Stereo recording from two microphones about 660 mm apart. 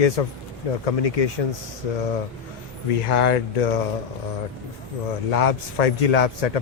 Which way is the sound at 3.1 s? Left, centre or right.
Left.